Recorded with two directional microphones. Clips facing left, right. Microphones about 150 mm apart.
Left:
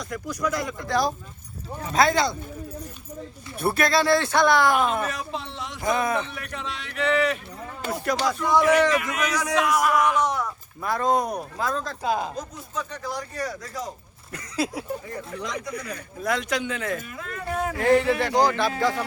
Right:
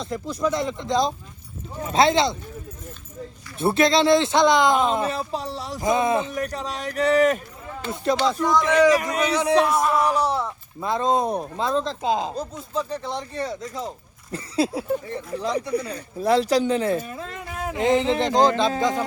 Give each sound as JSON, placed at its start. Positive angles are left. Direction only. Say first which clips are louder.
{"t": 0.0, "sound": "speech", "louder": "right 3 dB", "side_deg": -25}
{"t": 3.6, "sound": "speech", "louder": "right 4 dB", "side_deg": -25}
{"t": 5.8, "sound": "speech", "louder": "right 3 dB", "side_deg": -25}
{"t": 6.3, "sound": "speech", "louder": "right 7 dB", "side_deg": -40}
{"t": 8.0, "sound": "speech", "louder": "right 4 dB", "side_deg": -25}
{"t": 17.7, "sound": "speech", "louder": "right 1 dB", "side_deg": -20}